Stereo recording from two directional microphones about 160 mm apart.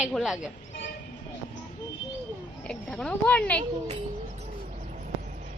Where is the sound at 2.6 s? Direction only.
5° left (ahead or behind).